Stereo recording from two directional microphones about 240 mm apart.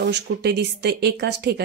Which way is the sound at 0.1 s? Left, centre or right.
Right.